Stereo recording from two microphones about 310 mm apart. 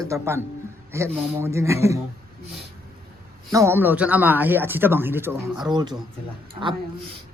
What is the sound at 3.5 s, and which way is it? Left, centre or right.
A man's voice, centre.